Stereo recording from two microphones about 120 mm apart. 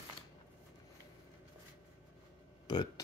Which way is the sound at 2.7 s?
35° left (ahead or behind).